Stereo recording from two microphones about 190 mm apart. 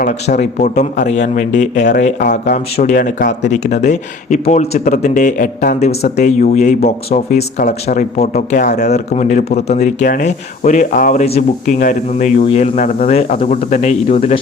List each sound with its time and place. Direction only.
0.0 s speech: 40° left (ahead or behind)